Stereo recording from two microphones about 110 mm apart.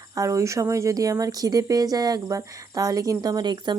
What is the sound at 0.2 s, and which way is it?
A woman's voice, 30° right (ahead or behind).